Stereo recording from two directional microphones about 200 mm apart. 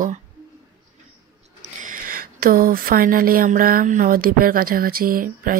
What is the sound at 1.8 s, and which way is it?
Speech, 45° right (ahead or behind).